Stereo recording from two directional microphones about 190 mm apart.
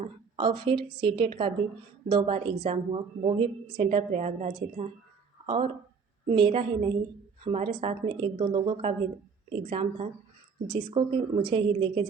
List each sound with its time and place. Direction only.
0.0 s a woman's voice: 25° right (ahead or behind)